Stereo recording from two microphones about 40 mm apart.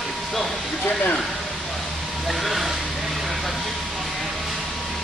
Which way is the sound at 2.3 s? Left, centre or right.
Centre.